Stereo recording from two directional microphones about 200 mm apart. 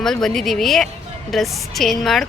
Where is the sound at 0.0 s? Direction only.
Centre (ahead or behind).